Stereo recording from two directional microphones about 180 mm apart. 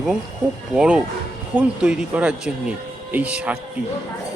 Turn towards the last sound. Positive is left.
turn(degrees=-5)  # may be behind; listen again after turning